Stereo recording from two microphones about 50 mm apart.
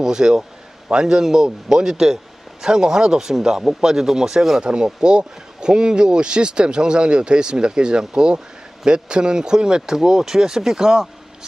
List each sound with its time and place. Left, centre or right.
0.0 s speech: centre